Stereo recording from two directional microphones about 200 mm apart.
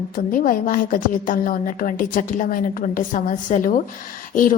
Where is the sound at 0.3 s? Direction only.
45° left (ahead or behind).